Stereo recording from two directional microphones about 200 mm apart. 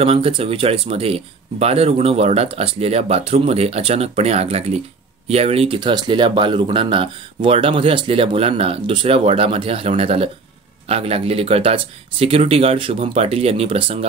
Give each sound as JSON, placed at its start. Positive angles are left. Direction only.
{"t": 0.0, "sound": "speech", "side_deg": -30}